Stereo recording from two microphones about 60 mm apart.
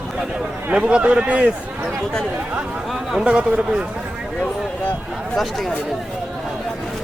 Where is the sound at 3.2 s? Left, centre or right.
Centre.